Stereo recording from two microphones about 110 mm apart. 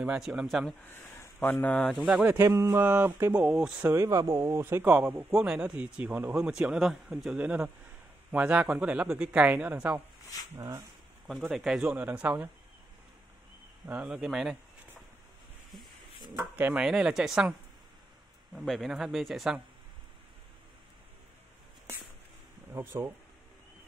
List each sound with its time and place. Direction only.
0.0 s speech: 5° right (ahead or behind)
0.8 s speech: 20° left (ahead or behind)
2.2 s speech: 25° right (ahead or behind)
3.3 s speech: 10° right (ahead or behind)
3.9 s speech: 30° right (ahead or behind)
11.5 s speech: 5° right (ahead or behind)
13.8 s speech: 10° right (ahead or behind)
16.3 s speech: 15° right (ahead or behind)
16.8 s speech: 5° right (ahead or behind)
22.7 s speech: 20° right (ahead or behind)